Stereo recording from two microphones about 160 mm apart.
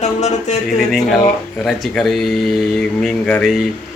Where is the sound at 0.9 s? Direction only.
Centre (ahead or behind).